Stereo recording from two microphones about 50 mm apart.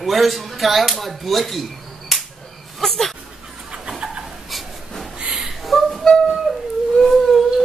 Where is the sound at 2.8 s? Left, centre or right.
Centre.